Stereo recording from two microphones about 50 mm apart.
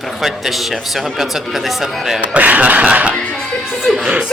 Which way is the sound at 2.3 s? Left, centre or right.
Right.